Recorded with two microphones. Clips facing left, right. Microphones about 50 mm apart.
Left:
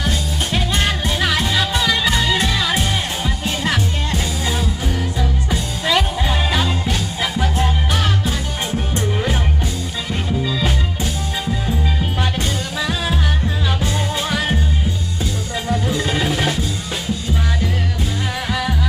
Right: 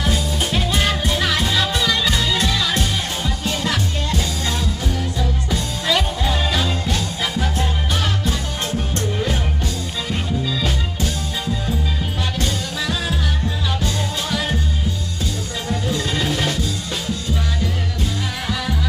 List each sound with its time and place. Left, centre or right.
0.0 s music: centre
9.0 s music: centre
12.4 s music: centre
15.7 s music: centre